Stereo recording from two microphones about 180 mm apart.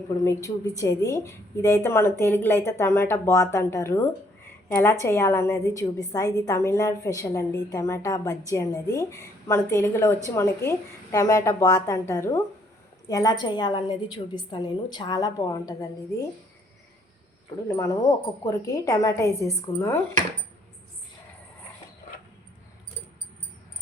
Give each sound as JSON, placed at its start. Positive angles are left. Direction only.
{"t": 0.1, "sound": "a woman's voice", "side_deg": 15}
{"t": 17.7, "sound": "a woman's voice", "side_deg": 20}